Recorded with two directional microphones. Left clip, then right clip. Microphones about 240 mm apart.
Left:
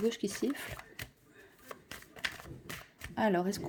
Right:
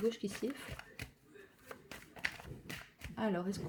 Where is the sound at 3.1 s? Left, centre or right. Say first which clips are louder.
Left 7 dB; left.